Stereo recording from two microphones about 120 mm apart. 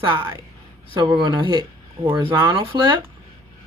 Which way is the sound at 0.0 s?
40° right (ahead or behind).